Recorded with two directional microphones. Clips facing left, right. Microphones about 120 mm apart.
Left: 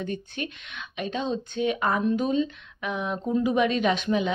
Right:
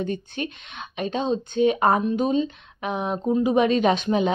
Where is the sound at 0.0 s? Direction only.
30° right (ahead or behind).